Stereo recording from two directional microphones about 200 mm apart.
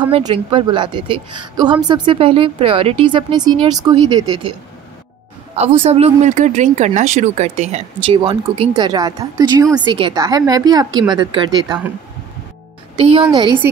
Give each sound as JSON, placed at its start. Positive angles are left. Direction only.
{"t": 0.1, "sound": "speech", "side_deg": -25}
{"t": 5.6, "sound": "speech", "side_deg": -30}
{"t": 12.9, "sound": "speech", "side_deg": -25}